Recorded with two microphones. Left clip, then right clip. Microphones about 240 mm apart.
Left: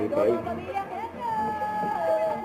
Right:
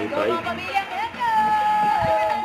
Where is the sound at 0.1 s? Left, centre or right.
Right.